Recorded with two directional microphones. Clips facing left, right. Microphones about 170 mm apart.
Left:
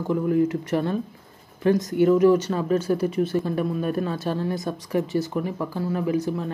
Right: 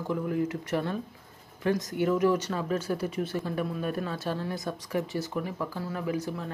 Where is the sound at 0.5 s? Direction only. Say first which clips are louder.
Left 6 dB; 30° left (ahead or behind).